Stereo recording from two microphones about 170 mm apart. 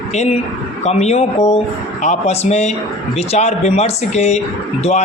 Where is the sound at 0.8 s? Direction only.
40° left (ahead or behind).